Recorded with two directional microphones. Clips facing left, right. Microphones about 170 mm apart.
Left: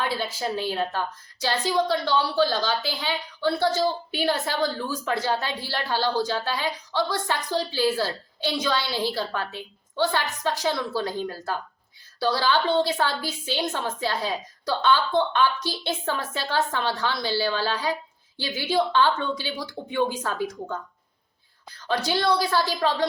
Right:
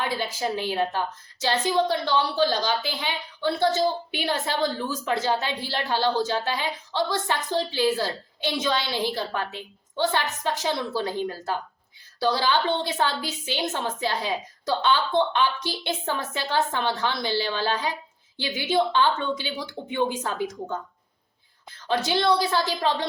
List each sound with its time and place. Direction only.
0.0 s a woman's voice: 20° right (ahead or behind)